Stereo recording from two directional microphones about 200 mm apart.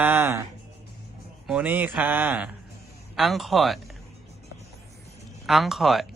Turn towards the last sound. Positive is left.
turn(degrees=0)  # may be behind; listen again after turning